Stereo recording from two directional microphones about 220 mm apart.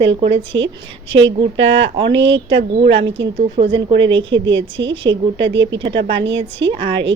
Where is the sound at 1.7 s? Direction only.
55° right (ahead or behind).